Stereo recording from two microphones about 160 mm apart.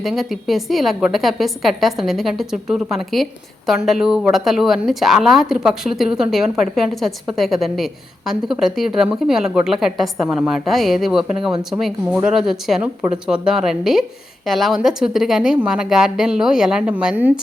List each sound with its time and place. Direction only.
0.0 s speech: centre (ahead or behind)